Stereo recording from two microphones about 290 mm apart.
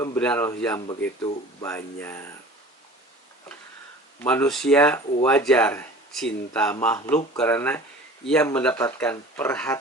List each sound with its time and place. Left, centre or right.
0.0 s speech: centre
4.2 s speech: centre